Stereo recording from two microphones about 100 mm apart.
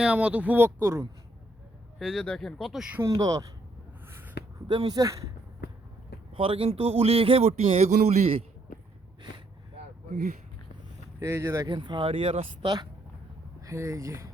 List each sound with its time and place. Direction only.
0.0 s speech: 10° right (ahead or behind)
2.0 s speech: centre (ahead or behind)
3.0 s speech: 35° right (ahead or behind)
4.9 s speech: 35° right (ahead or behind)
6.3 s speech: 65° right (ahead or behind); by 8.4 s 80° right
11.2 s speech: 25° right (ahead or behind)
11.7 s speech: 50° right (ahead or behind)
12.0 s speech: 65° right (ahead or behind)
12.6 s speech: 45° right (ahead or behind)
13.7 s speech: 30° right (ahead or behind)